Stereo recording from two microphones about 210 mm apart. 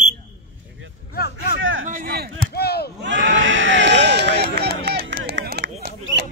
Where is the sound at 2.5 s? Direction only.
50° left (ahead or behind).